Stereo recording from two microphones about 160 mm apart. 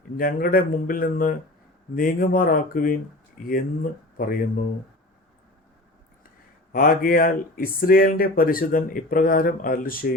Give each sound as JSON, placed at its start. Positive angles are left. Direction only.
{"t": 0.2, "sound": "speech", "side_deg": 60}
{"t": 6.7, "sound": "speech", "side_deg": 65}